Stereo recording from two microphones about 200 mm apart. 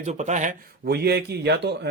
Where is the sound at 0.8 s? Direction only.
55° right (ahead or behind).